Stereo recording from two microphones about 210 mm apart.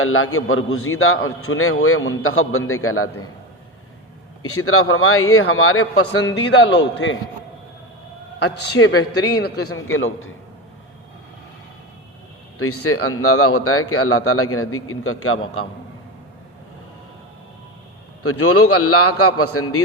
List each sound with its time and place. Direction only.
0.0 s a man's voice: 80° left
4.4 s speech: 90° left
6.3 s a man's voice: 55° left (ahead or behind)
8.4 s a man's voice: 55° left (ahead or behind)
9.6 s a man's voice: 75° left (ahead or behind)
12.5 s speech: 90° left
18.2 s speech: 90° left